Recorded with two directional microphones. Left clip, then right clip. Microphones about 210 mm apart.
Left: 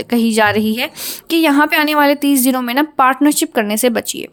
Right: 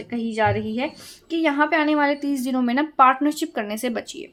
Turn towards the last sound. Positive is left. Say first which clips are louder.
# left 11 dB
turn(degrees=35)  # may be behind; listen again after turning